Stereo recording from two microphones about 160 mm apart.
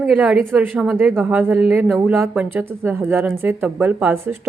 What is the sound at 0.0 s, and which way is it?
A woman's voice, 5° right (ahead or behind).